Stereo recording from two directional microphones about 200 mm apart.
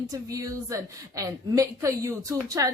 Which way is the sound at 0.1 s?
15° right (ahead or behind).